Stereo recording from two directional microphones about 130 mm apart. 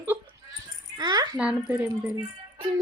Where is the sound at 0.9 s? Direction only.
30° right (ahead or behind).